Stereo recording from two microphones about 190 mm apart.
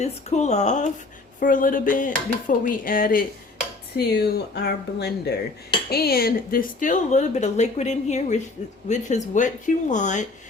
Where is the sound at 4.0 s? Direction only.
60° left (ahead or behind).